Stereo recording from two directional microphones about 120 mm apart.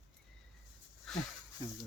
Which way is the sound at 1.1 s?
5° left (ahead or behind).